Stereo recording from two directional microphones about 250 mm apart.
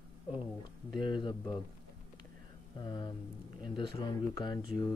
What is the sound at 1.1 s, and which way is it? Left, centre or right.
Speech, centre.